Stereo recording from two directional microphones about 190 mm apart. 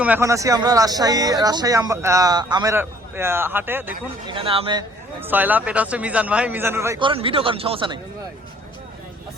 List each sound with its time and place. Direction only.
0.0 s speech: 10° right (ahead or behind)
2.7 s a man's voice: 10° right (ahead or behind)
4.3 s speech: 30° right (ahead or behind)
5.2 s a man's voice: 10° right (ahead or behind)
7.0 s speech: 30° right (ahead or behind)